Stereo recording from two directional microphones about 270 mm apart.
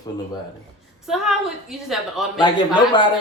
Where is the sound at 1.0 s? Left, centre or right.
Centre.